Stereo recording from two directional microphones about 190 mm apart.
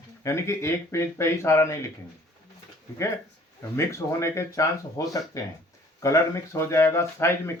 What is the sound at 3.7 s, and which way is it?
Speech, 15° left (ahead or behind).